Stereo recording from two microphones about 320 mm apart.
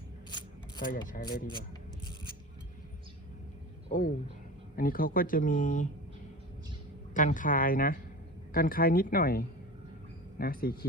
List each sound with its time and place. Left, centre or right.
0.3 s a sound: centre
3.8 s speech: left
7.1 s speech: left